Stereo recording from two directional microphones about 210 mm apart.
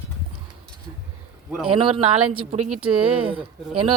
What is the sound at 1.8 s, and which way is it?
Speech, 25° right (ahead or behind).